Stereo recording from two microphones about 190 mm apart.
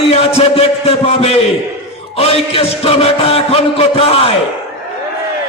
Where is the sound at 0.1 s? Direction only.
30° left (ahead or behind).